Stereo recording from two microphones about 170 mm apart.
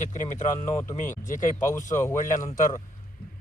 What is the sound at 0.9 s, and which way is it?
Speech, 50° left (ahead or behind).